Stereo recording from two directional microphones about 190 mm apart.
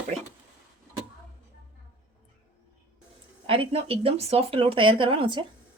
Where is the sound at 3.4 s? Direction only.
30° right (ahead or behind).